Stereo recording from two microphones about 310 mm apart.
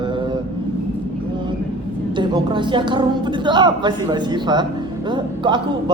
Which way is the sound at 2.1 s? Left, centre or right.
Centre.